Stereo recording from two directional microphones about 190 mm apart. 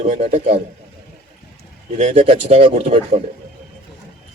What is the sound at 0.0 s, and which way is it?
Speech, 40° right (ahead or behind).